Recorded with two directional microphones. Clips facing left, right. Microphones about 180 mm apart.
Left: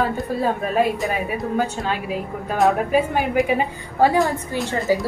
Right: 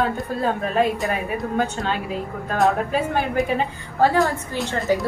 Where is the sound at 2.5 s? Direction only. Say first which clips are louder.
Left 2 dB; 5° left (ahead or behind).